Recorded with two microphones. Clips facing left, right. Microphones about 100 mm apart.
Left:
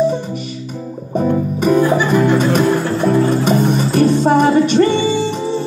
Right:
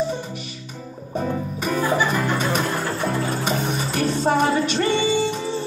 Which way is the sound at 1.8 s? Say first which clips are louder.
Left 5 dB; 55° left (ahead or behind).